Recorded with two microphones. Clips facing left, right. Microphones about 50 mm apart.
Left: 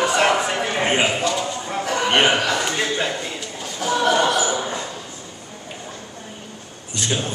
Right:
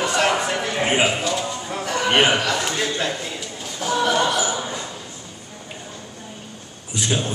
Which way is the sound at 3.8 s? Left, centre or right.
Centre.